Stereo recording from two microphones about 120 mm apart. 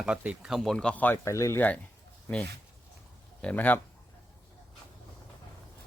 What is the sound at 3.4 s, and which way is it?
Speech, 10° left (ahead or behind).